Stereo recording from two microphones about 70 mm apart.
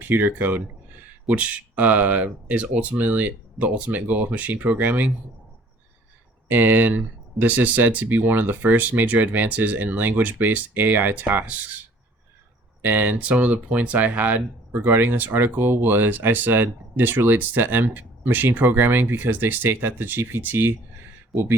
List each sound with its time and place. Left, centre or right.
0.0 s speech: right
6.5 s speech: right
12.8 s speech: right